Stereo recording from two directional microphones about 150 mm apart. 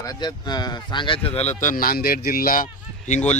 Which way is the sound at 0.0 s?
25° left (ahead or behind).